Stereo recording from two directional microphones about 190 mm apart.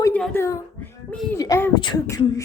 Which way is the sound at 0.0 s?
10° left (ahead or behind).